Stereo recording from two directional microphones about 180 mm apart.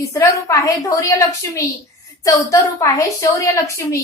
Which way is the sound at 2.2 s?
20° left (ahead or behind).